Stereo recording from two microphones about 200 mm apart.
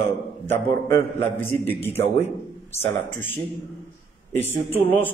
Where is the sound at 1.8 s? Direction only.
30° left (ahead or behind).